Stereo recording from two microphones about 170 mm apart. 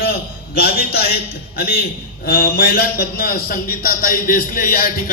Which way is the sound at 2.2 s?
60° left (ahead or behind).